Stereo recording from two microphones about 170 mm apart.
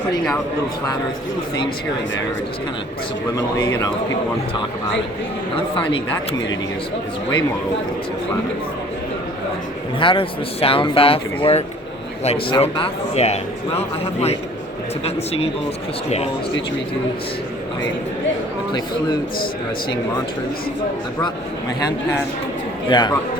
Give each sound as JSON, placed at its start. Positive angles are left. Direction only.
{"t": 3.3, "sound": "speech", "side_deg": 20}
{"t": 10.0, "sound": "a man's voice", "side_deg": 30}
{"t": 22.9, "sound": "speech", "side_deg": 25}